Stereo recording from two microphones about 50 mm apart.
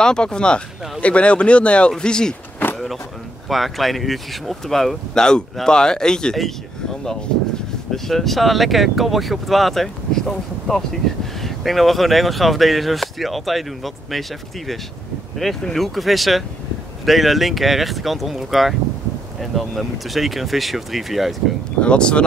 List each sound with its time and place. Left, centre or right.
0.0 s speech: centre
3.4 s speech: centre
7.9 s speech: centre
15.3 s speech: centre
21.8 s speech: left